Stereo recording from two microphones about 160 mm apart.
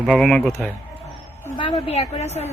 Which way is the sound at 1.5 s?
35° left (ahead or behind).